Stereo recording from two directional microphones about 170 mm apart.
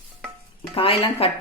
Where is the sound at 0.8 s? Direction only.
35° left (ahead or behind).